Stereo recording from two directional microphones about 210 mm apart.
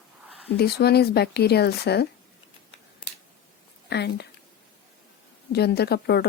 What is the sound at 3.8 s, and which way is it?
Speech, 50° left (ahead or behind).